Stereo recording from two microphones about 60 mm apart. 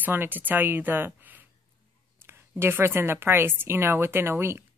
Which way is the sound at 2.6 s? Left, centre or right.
Right.